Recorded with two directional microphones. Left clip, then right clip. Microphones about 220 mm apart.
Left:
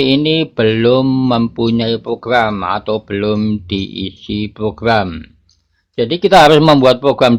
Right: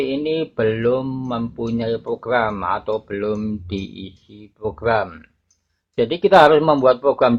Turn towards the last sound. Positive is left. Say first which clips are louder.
# left 5 dB
turn(degrees=25)  # may be behind; listen again after turning